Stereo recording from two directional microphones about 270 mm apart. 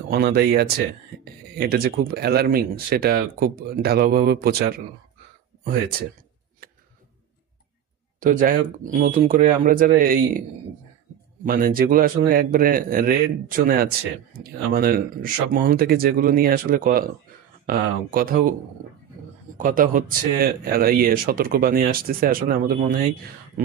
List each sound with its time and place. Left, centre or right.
0.1 s speech: right
8.2 s speech: right
11.4 s speech: right